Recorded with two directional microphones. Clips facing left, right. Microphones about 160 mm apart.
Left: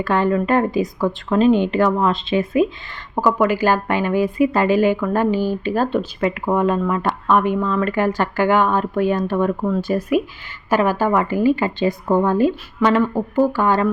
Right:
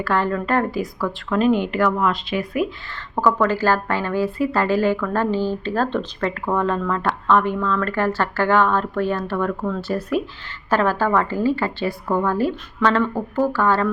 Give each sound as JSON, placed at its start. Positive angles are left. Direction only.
{"t": 0.0, "sound": "speech", "side_deg": 15}